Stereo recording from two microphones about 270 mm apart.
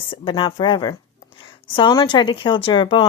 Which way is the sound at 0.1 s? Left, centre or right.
Centre.